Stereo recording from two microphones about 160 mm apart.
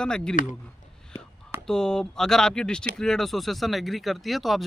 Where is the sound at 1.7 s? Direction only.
5° left (ahead or behind).